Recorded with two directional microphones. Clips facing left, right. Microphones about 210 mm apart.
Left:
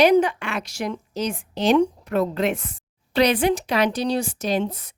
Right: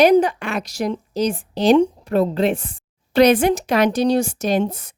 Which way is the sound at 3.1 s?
45° right (ahead or behind).